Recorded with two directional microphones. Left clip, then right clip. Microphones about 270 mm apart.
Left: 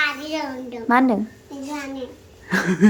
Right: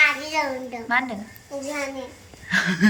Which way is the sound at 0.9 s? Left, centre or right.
Left.